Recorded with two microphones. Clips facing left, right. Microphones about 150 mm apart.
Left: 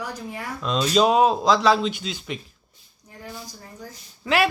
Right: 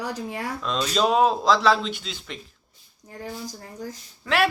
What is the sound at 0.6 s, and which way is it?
A man's voice, 5° left (ahead or behind).